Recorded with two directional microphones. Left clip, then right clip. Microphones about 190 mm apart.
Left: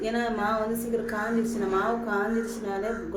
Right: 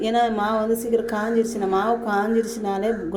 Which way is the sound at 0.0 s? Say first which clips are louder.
Right 7 dB; 40° right (ahead or behind).